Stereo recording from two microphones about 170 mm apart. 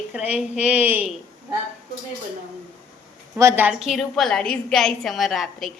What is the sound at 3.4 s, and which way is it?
Speech, 15° right (ahead or behind).